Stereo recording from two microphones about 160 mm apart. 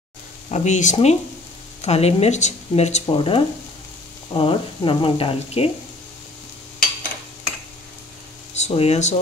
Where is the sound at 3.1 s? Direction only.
35° left (ahead or behind).